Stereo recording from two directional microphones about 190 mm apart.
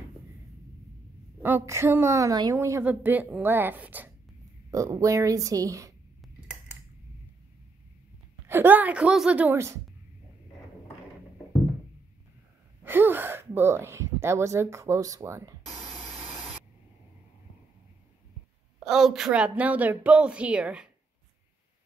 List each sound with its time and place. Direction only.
1.4 s a woman's voice: 10° right (ahead or behind)
8.5 s a woman's voice: 10° right (ahead or behind)
12.8 s a woman's voice: 10° right (ahead or behind)
15.7 s a sound: centre (ahead or behind)
18.9 s a woman's voice: centre (ahead or behind)